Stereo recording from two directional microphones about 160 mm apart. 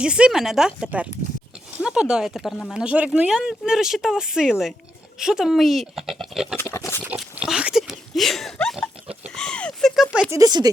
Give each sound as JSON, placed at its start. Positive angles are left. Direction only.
{"t": 0.0, "sound": "speech", "side_deg": -5}
{"t": 6.6, "sound": "pig", "side_deg": 15}
{"t": 7.0, "sound": "speech", "side_deg": -5}
{"t": 9.3, "sound": "a sound", "side_deg": 5}
{"t": 10.2, "sound": "speech", "side_deg": -20}